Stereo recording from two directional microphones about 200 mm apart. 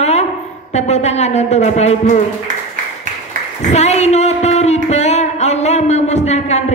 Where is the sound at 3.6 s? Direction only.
35° left (ahead or behind).